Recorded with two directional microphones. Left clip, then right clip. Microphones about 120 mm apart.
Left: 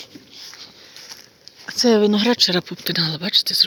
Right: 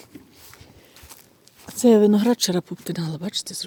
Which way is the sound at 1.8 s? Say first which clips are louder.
Even; 50° right (ahead or behind).